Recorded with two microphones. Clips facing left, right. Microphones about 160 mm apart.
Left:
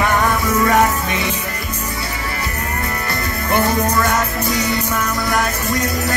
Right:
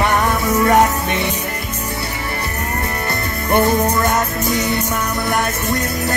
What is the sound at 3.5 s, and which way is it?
Music, 20° right (ahead or behind).